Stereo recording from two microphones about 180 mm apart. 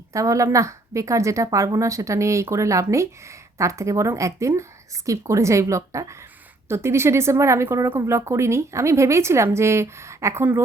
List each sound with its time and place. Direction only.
0.1 s a woman's voice: 15° right (ahead or behind)